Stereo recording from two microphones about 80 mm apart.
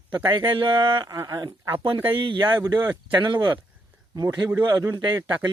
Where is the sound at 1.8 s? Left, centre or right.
Right.